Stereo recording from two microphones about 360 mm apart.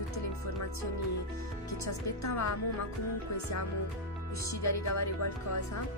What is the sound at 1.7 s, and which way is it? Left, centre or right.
Speech, left.